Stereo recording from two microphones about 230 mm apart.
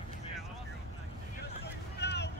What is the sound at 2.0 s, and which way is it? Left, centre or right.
Boat, left.